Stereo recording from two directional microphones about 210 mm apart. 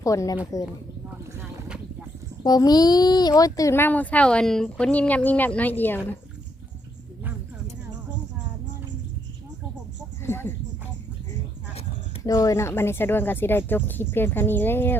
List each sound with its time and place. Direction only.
0.0 s a child's voice: 15° left (ahead or behind)
1.3 s boat: 5° right (ahead or behind)
2.4 s a child's voice: 20° left (ahead or behind)
10.2 s a sound: 10° left (ahead or behind)
12.2 s a child's voice: 15° left (ahead or behind)